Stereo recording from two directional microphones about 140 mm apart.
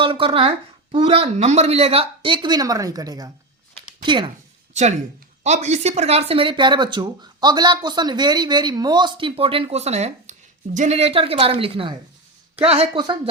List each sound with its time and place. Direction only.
0.0 s speech: 40° right (ahead or behind)
4.7 s speech: 55° right (ahead or behind)